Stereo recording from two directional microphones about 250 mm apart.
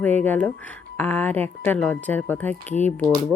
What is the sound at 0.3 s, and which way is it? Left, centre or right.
Speech, centre.